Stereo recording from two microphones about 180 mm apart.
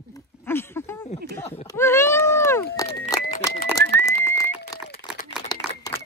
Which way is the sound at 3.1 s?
20° left (ahead or behind).